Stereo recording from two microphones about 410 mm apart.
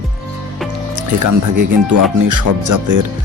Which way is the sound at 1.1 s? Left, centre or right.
Right.